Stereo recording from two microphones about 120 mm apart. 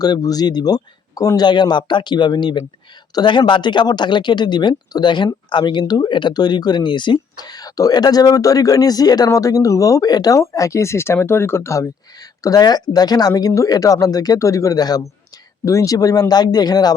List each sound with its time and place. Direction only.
0.0 s speech: 30° left (ahead or behind)